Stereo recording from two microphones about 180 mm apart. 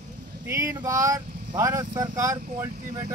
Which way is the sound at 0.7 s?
20° right (ahead or behind).